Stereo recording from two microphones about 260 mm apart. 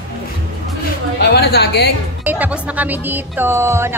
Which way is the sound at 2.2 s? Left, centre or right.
Centre.